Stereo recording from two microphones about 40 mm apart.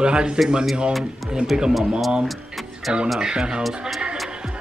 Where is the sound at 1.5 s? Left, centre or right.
Centre.